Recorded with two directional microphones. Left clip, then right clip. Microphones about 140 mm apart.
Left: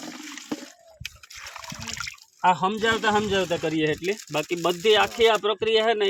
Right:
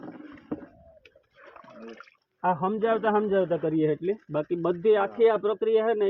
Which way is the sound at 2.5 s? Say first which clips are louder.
Left 2 dB; 40° left (ahead or behind).